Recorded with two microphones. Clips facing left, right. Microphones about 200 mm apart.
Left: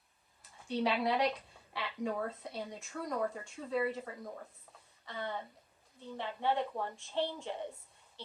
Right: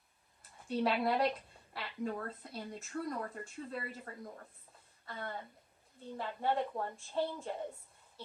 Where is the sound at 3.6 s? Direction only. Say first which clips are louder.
Left 10 dB; 65° left (ahead or behind).